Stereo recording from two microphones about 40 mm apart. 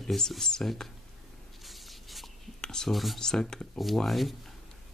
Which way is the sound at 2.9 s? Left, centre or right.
Centre.